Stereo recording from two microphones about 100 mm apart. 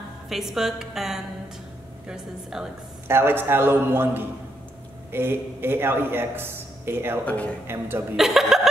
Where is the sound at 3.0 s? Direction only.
25° right (ahead or behind).